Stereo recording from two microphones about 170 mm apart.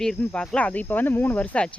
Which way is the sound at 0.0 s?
5° left (ahead or behind).